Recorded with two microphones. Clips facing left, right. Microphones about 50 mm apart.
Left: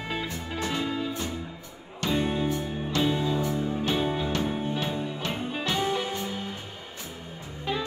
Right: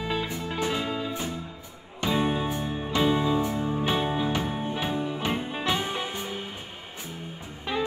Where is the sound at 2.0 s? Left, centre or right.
Centre.